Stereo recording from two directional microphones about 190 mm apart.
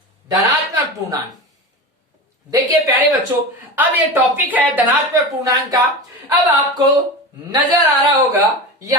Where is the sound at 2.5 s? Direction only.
20° right (ahead or behind).